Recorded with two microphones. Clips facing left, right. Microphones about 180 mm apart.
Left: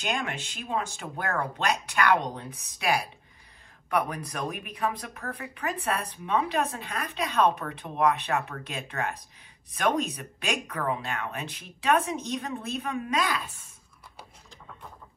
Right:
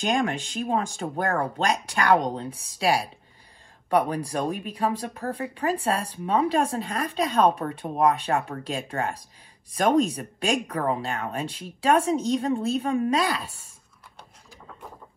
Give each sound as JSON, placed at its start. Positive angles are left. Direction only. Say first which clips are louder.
{"t": 0.0, "sound": "speech", "louder": "right 7 dB", "side_deg": -35}